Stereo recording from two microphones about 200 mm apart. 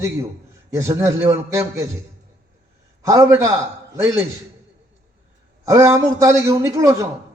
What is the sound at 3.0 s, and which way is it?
Speech, 15° right (ahead or behind).